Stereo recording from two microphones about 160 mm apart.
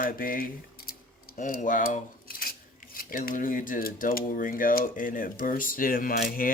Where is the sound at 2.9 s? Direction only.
60° left (ahead or behind).